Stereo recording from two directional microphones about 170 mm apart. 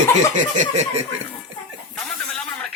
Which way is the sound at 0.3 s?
45° right (ahead or behind).